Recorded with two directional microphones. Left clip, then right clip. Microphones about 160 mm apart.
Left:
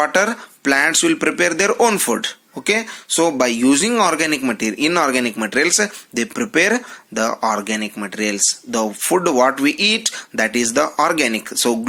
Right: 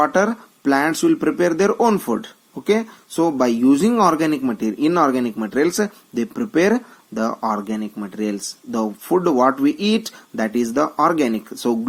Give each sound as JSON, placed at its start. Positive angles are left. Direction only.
{"t": 0.0, "sound": "speech", "side_deg": 35}